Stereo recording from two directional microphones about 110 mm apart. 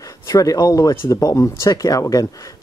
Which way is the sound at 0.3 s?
35° left (ahead or behind).